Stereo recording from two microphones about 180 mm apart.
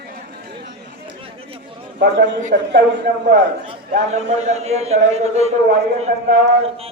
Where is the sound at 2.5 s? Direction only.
70° right (ahead or behind).